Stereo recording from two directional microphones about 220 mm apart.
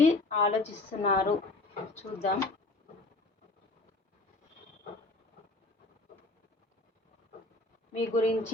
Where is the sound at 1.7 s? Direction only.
30° left (ahead or behind).